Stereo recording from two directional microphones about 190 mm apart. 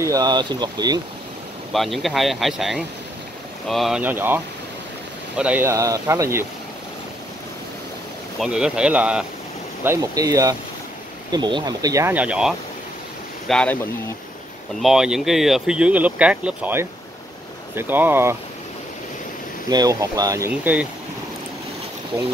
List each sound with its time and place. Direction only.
0.0 s speech: 20° right (ahead or behind)
1.7 s speech: centre (ahead or behind)
5.4 s speech: 10° right (ahead or behind)
8.4 s speech: 5° right (ahead or behind)
9.8 s speech: 20° right (ahead or behind); by 13.7 s 5° left (ahead or behind)
14.8 s speech: centre (ahead or behind)
19.7 s speech: 20° right (ahead or behind)